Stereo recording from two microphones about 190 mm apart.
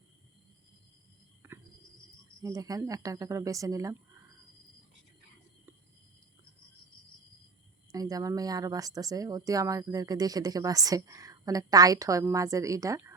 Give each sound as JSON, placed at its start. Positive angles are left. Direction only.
{"t": 1.4, "sound": "cricket", "side_deg": -10}
{"t": 2.4, "sound": "speech", "side_deg": -20}
{"t": 7.9, "sound": "speech", "side_deg": -20}